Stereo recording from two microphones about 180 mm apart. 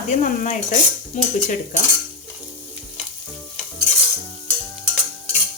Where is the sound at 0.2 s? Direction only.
45° left (ahead or behind).